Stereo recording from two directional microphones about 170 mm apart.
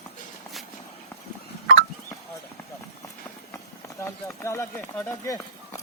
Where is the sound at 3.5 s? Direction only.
15° left (ahead or behind).